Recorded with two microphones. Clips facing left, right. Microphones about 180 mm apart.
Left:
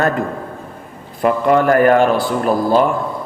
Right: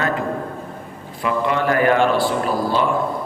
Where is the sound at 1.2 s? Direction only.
45° left (ahead or behind).